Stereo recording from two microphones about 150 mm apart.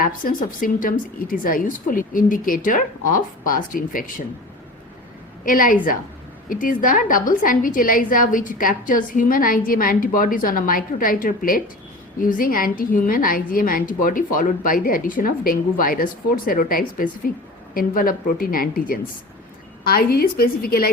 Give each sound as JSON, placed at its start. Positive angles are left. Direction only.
{"t": 0.0, "sound": "a woman's voice", "side_deg": 70}
{"t": 5.5, "sound": "a woman's voice", "side_deg": 65}